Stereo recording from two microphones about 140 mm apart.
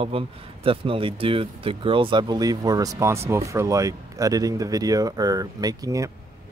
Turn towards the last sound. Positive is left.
turn(degrees=-25)  # may be behind; listen again after turning